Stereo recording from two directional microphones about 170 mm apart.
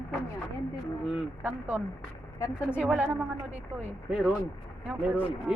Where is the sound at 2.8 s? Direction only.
10° right (ahead or behind).